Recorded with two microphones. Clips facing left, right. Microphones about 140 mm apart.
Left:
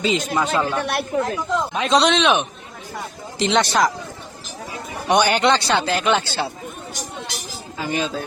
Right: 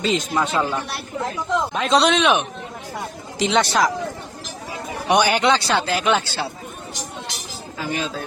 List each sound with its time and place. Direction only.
0.0 s speech: centre (ahead or behind)
0.8 s speech: 70° left (ahead or behind)
1.7 s speech: centre (ahead or behind)
5.0 s speech: 5° right (ahead or behind)
7.8 s speech: centre (ahead or behind)